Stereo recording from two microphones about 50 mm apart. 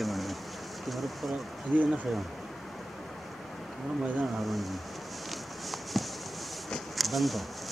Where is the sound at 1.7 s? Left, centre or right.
Right.